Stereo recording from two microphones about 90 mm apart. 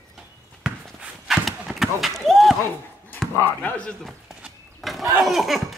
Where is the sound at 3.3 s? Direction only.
20° left (ahead or behind).